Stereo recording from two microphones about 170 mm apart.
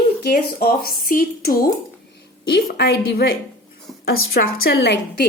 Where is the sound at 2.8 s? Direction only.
65° left (ahead or behind).